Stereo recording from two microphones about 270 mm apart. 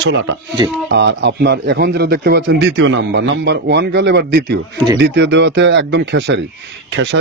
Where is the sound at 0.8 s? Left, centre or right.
Right.